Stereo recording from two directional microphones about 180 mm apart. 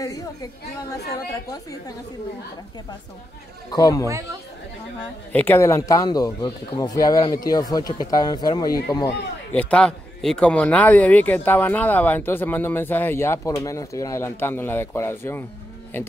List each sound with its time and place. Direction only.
0.0 s speech: 20° left (ahead or behind)
3.7 s speech: 20° left (ahead or behind)
5.3 s speech: 10° left (ahead or behind)
9.5 s a man's voice: 5° left (ahead or behind)